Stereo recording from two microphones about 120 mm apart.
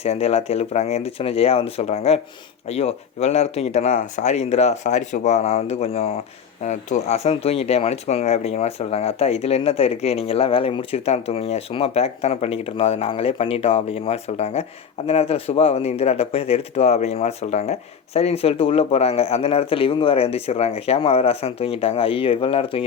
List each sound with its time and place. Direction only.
0.0 s speech: 60° left (ahead or behind)